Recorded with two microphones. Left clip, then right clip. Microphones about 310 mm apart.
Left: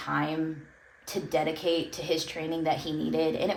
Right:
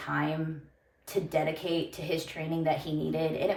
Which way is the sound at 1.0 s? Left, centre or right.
Left.